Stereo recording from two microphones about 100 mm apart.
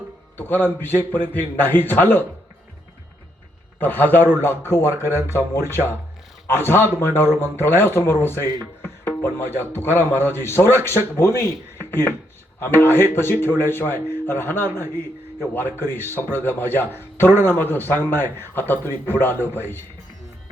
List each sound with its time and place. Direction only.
0.3 s a man's voice: 20° left (ahead or behind)
3.8 s a man's voice: 20° left (ahead or behind)